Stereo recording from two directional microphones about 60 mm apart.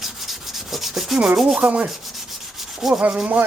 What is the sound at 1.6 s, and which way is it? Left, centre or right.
Rub, right.